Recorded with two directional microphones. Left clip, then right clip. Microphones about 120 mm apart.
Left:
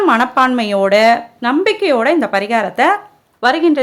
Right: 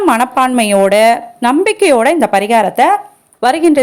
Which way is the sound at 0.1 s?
35° right (ahead or behind).